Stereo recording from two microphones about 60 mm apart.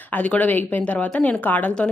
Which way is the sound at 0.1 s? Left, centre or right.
Left.